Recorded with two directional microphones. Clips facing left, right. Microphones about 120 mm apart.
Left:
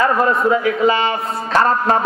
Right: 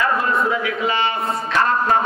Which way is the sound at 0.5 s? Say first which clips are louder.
Left 6 dB; 35° left (ahead or behind).